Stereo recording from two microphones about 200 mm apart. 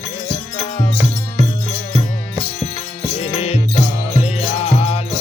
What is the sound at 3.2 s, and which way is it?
Music, 30° left (ahead or behind).